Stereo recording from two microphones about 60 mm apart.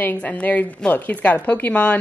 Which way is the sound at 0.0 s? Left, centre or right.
Left.